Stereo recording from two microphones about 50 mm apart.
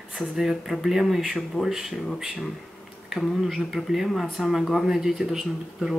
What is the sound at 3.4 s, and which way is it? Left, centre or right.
Speech, centre.